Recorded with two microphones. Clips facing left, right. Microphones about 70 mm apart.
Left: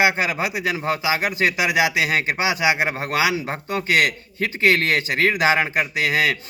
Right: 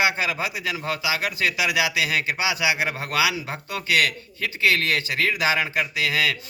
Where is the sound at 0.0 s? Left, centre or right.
Left.